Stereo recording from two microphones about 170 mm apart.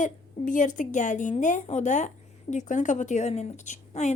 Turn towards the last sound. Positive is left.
turn(degrees=45)  # may be behind; listen again after turning